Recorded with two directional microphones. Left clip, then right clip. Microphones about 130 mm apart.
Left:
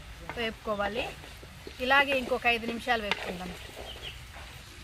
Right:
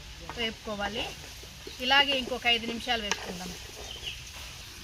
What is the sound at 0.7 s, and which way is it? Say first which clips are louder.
Speech: left 2 dB; 10° left (ahead or behind).